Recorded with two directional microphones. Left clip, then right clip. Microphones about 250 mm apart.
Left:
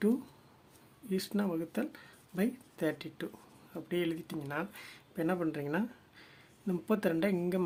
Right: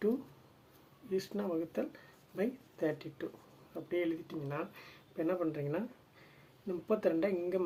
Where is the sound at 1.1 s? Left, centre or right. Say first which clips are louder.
Even; left.